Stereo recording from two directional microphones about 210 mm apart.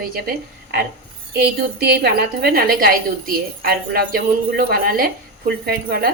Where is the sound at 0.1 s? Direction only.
45° right (ahead or behind).